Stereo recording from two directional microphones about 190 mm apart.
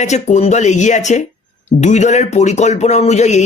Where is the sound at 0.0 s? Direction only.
35° left (ahead or behind).